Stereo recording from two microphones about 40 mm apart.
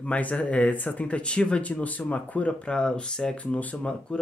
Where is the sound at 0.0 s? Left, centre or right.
Left.